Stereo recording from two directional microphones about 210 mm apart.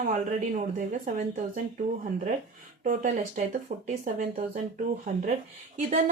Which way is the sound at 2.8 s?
40° right (ahead or behind).